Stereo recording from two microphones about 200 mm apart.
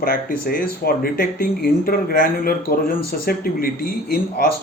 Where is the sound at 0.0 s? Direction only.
50° left (ahead or behind).